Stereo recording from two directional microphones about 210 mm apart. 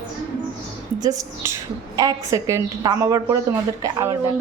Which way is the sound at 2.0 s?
15° right (ahead or behind).